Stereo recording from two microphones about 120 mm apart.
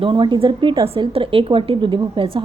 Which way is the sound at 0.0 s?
45° right (ahead or behind).